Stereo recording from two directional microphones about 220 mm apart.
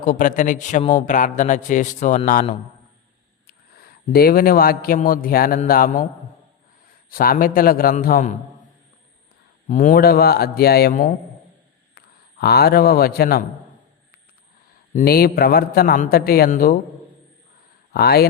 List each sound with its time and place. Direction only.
0.0 s a man's voice: 35° left (ahead or behind)
7.1 s speech: 40° left (ahead or behind)
9.6 s a man's voice: 35° left (ahead or behind)
14.9 s a man's voice: 45° left (ahead or behind)
17.9 s a man's voice: 45° left (ahead or behind)